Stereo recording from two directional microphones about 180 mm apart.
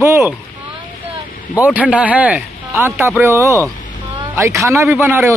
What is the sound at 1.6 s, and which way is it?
Speech, 10° right (ahead or behind).